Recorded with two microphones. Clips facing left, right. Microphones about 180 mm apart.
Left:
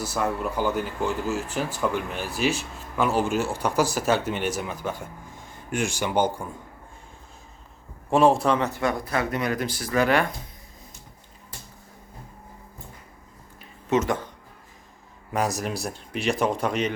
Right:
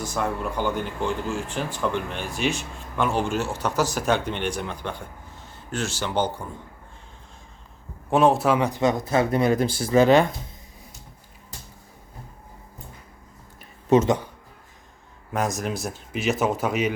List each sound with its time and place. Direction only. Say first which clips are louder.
0.0 s speech: even; 5° left (ahead or behind)
8.1 s speech: even; centre (ahead or behind); by 10.2 s 25° right (ahead or behind)
13.9 s speech: right 5 dB; 30° right (ahead or behind)
15.3 s speech: even; centre (ahead or behind)